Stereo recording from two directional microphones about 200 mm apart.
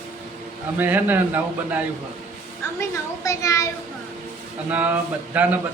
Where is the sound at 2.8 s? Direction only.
15° left (ahead or behind).